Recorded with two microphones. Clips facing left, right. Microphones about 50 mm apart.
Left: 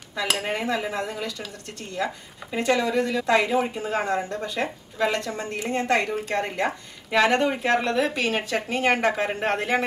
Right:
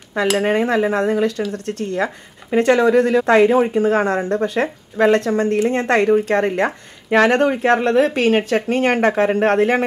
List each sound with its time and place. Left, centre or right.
0.4 s speech: right